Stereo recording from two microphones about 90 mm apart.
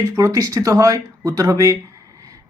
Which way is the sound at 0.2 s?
40° right (ahead or behind).